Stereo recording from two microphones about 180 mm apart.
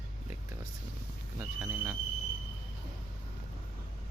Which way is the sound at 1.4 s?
10° right (ahead or behind).